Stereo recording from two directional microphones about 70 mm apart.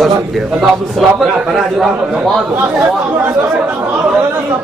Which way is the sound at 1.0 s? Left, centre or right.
Centre.